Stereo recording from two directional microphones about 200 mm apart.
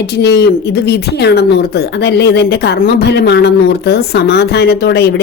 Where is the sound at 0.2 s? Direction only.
55° left (ahead or behind).